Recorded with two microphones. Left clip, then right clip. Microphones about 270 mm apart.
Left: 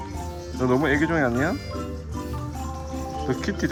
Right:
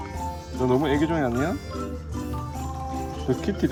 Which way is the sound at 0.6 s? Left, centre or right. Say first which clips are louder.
Left 1 dB; centre.